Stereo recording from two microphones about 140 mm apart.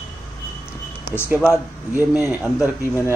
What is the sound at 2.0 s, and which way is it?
Speech, 15° right (ahead or behind).